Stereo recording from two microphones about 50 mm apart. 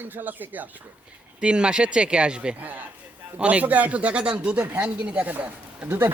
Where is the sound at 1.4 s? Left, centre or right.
Centre.